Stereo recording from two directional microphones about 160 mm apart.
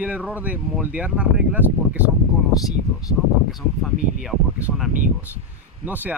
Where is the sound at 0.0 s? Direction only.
10° right (ahead or behind).